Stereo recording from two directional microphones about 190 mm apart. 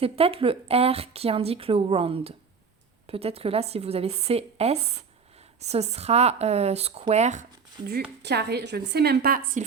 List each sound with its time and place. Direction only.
0.0 s a woman's voice: 30° right (ahead or behind)
8.2 s a woman's voice: 60° right (ahead or behind)